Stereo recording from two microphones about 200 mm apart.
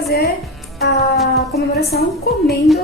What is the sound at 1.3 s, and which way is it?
Speech, 50° left (ahead or behind).